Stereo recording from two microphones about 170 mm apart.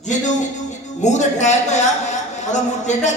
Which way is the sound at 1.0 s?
45° left (ahead or behind).